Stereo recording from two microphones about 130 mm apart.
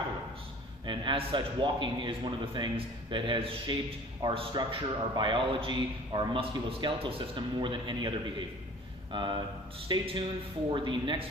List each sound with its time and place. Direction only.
0.8 s a man's voice: 40° right (ahead or behind)
9.1 s a man's voice: 35° right (ahead or behind)